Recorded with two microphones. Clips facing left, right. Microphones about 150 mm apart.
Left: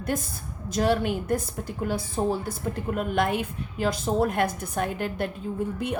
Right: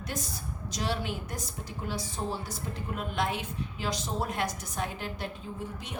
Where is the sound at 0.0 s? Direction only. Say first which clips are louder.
Left 7 dB; 50° left (ahead or behind).